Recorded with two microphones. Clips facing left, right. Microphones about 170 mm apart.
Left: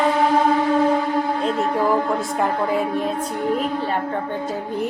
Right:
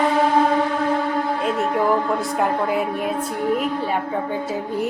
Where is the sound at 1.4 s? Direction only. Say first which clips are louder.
Right 2 dB; centre (ahead or behind).